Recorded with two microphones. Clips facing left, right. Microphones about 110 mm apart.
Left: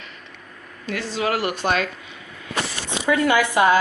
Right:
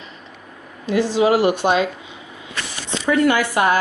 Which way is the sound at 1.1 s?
20° right (ahead or behind).